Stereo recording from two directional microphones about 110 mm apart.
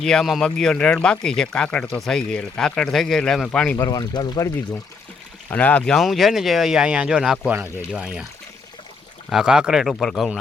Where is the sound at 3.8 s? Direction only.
35° left (ahead or behind).